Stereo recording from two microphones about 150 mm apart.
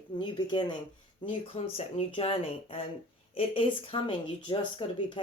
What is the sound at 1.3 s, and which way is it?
Speech, 40° left (ahead or behind).